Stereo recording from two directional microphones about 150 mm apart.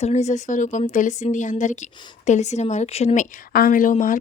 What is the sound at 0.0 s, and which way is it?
Speech, 45° left (ahead or behind).